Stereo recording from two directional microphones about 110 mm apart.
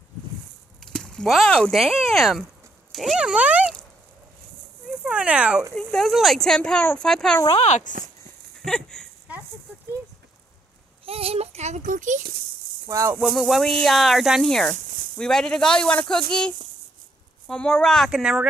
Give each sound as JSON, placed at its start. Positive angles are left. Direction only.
{"t": 0.7, "sound": "speech", "side_deg": 5}
{"t": 4.8, "sound": "speech", "side_deg": -5}
{"t": 5.8, "sound": "speech", "side_deg": 5}
{"t": 7.5, "sound": "speech", "side_deg": 90}
{"t": 8.5, "sound": "speech", "side_deg": 5}
{"t": 11.1, "sound": "speech", "side_deg": -60}
{"t": 12.8, "sound": "speech", "side_deg": -30}
{"t": 13.2, "sound": "speech", "side_deg": 0}
{"t": 18.1, "sound": "speech", "side_deg": -5}